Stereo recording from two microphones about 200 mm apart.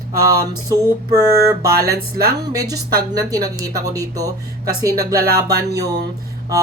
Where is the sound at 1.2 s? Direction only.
15° right (ahead or behind).